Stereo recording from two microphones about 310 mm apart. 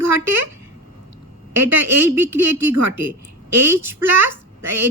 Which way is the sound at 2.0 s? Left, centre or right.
Centre.